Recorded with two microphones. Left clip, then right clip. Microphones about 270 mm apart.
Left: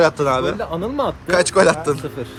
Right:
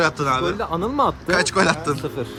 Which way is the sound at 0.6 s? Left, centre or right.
Centre.